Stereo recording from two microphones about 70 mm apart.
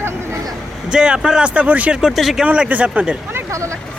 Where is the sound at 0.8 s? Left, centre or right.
Centre.